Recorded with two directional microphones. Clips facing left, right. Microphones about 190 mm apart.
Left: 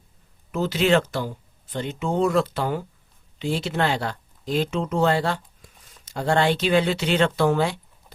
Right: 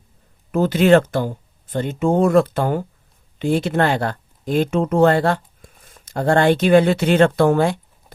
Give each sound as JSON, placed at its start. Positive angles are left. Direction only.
{"t": 0.5, "sound": "speech", "side_deg": -50}